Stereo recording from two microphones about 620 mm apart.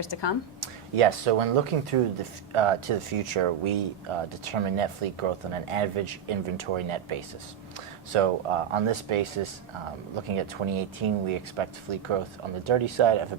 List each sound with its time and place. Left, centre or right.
0.0 s speech: left
0.6 s speech: right